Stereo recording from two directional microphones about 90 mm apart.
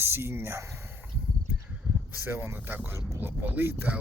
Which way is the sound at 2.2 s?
25° right (ahead or behind).